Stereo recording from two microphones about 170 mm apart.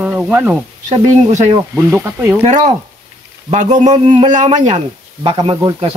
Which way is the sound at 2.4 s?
40° right (ahead or behind).